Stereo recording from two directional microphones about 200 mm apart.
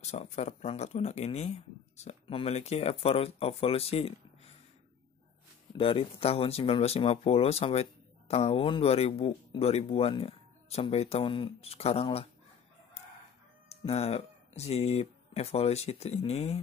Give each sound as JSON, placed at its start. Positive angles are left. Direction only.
{"t": 0.0, "sound": "speech", "side_deg": 35}
{"t": 5.8, "sound": "speech", "side_deg": 25}
{"t": 13.7, "sound": "speech", "side_deg": 30}